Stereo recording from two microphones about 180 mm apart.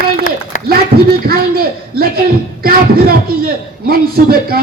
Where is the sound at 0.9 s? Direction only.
55° right (ahead or behind).